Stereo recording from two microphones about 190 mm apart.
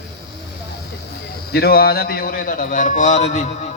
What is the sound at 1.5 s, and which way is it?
A man's voice, 55° left (ahead or behind).